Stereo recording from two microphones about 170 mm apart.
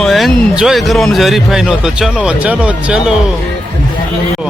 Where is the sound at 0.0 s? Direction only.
Centre (ahead or behind).